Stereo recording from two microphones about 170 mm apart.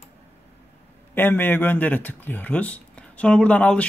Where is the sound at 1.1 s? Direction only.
10° left (ahead or behind).